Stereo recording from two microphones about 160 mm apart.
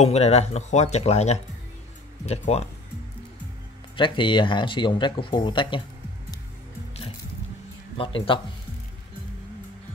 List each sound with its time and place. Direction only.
0.0 s speech: 40° left (ahead or behind)
3.9 s speech: 30° left (ahead or behind)
8.0 s speech: 35° left (ahead or behind)